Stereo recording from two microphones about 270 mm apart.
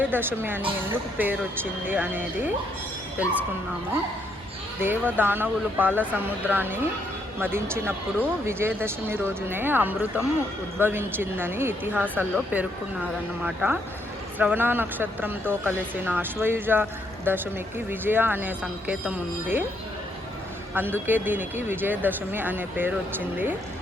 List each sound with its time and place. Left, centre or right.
0.0 s speech: centre
1.9 s speech: centre
4.8 s speech: centre
20.7 s speech: centre